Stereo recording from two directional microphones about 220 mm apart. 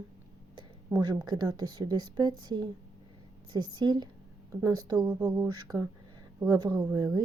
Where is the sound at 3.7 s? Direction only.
20° right (ahead or behind).